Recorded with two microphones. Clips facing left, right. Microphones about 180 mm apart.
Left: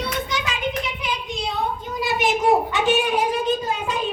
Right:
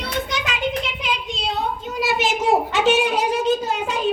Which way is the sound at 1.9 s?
80° right.